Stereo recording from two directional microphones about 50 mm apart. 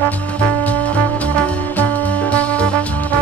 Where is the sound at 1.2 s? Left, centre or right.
Left.